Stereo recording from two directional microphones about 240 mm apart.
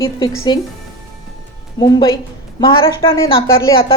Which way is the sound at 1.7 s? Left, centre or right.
Centre.